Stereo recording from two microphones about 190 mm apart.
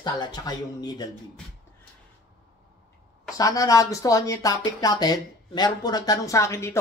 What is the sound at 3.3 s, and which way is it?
Speech, 20° left (ahead or behind).